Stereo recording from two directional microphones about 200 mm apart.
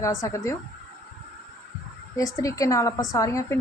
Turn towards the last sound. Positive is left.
turn(degrees=15)  # may be behind; listen again after turning